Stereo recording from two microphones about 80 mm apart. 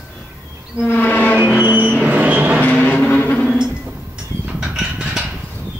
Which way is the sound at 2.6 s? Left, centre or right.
Centre.